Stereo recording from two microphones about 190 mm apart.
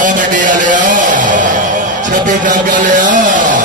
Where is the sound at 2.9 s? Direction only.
45° right (ahead or behind).